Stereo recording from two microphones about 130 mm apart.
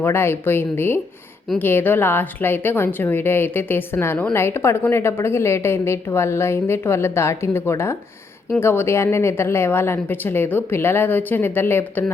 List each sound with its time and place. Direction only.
0.0 s a woman's voice: 20° left (ahead or behind)